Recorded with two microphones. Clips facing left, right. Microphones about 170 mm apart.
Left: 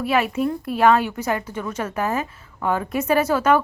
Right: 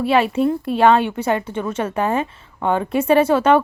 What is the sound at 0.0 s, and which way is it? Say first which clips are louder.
A woman's voice: right 4 dB; 30° right (ahead or behind).